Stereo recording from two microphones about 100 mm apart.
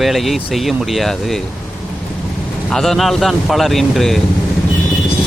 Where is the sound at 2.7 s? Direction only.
5° left (ahead or behind).